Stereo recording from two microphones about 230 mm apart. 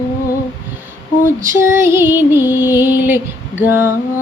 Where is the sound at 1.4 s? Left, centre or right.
Centre.